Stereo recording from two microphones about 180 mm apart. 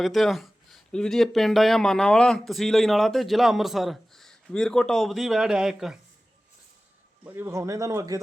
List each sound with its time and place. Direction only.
0.0 s speech: centre (ahead or behind)
7.3 s speech: 15° right (ahead or behind)